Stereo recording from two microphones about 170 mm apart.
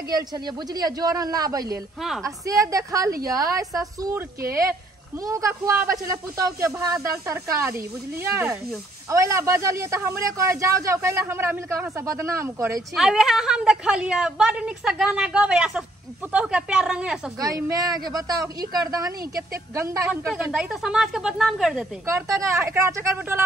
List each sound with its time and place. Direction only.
0.1 s speech: 25° right (ahead or behind)
2.0 s a woman's voice: centre (ahead or behind)
2.2 s speech: 20° right (ahead or behind)
5.2 s speech: 20° right (ahead or behind)
12.9 s a woman's voice: centre (ahead or behind)
17.6 s speech: 20° right (ahead or behind)
20.1 s a woman's voice: 5° right (ahead or behind)
22.1 s speech: 15° right (ahead or behind)